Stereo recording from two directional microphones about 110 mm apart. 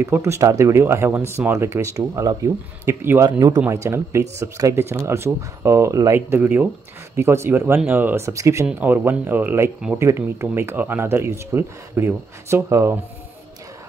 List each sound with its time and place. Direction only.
0.0 s speech: 25° right (ahead or behind)
3.3 s speech: 30° right (ahead or behind)
8.6 s speech: 15° right (ahead or behind)